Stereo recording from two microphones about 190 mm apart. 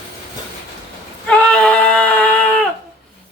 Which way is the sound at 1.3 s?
5° left (ahead or behind).